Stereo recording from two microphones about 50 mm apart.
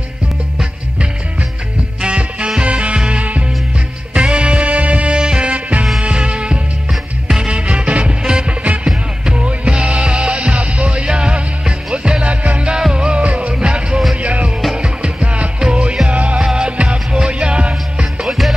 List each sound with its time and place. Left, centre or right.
2.0 s music: right
6.9 s music: centre
7.4 s music: right
18.2 s music: centre